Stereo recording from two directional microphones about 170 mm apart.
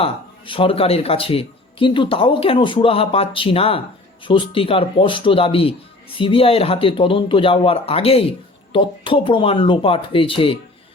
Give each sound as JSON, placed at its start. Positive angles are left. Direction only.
{"t": 0.0, "sound": "speech", "side_deg": 30}